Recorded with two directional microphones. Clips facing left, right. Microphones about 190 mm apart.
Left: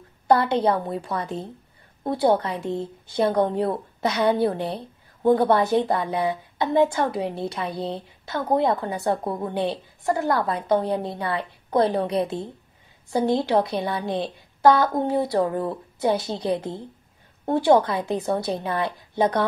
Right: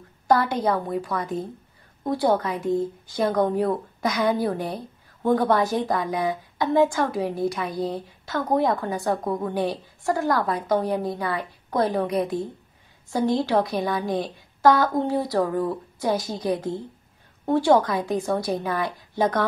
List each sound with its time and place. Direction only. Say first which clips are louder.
0.3 s a woman's voice: left 2 dB; 25° left (ahead or behind)
17.5 s a woman's voice: left 1 dB; 20° left (ahead or behind)